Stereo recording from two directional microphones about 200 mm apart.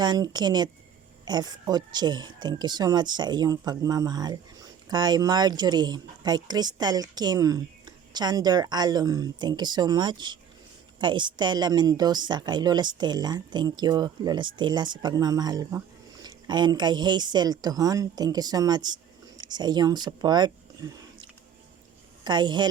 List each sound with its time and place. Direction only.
0.0 s speech: 20° right (ahead or behind)
22.2 s speech: 20° right (ahead or behind)